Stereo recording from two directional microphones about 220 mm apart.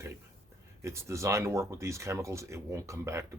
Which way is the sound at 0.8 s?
15° right (ahead or behind).